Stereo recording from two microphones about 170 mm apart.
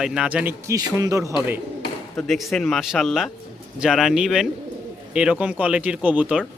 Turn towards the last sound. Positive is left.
turn(degrees=-10)  # may be behind; listen again after turning